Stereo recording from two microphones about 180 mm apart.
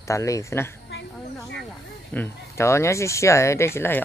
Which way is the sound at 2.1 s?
10° left (ahead or behind).